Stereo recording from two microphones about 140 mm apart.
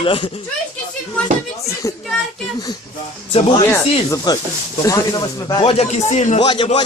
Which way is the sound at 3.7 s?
25° left (ahead or behind).